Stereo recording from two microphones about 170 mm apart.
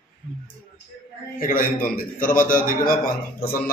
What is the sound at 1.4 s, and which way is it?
A man's voice, 55° left (ahead or behind).